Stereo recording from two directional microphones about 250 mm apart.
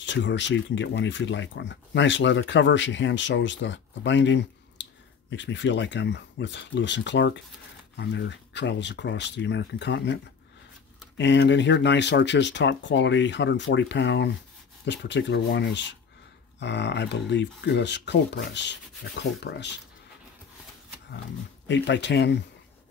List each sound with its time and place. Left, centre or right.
0.0 s speech: left
11.1 s speech: left
21.6 s speech: left